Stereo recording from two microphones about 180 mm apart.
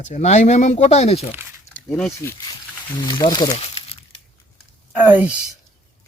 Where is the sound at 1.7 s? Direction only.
10° left (ahead or behind).